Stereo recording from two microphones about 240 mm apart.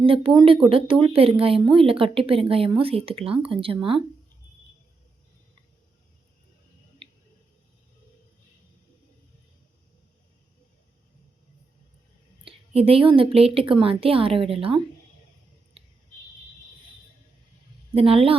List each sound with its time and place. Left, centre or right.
0.0 s speech: right
7.0 s a sound: right
12.5 s speech: right
17.9 s speech: right